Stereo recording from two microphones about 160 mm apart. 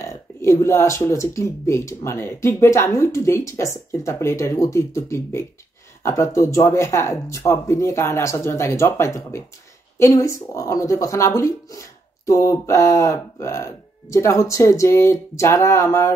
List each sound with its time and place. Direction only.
0.0 s speech: 15° left (ahead or behind)